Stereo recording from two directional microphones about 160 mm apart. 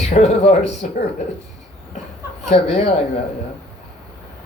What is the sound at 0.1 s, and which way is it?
Speech, 45° left (ahead or behind).